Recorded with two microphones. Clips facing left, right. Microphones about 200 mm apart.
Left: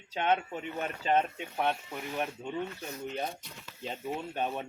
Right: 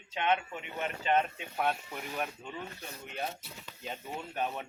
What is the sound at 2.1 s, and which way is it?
Speech, 20° left (ahead or behind).